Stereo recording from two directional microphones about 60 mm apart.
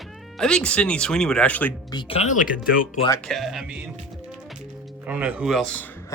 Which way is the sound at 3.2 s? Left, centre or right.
Centre.